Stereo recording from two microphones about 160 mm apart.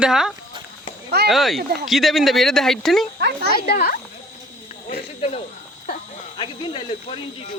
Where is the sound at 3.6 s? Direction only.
70° left (ahead or behind).